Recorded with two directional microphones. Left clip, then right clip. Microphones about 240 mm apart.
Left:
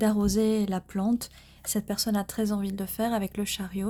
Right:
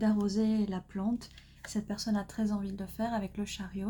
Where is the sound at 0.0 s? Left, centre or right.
Left.